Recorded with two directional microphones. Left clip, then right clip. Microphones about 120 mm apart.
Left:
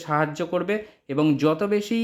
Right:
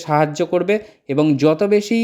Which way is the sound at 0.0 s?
35° right (ahead or behind).